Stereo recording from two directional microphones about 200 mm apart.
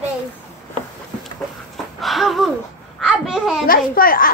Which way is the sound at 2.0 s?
Centre (ahead or behind).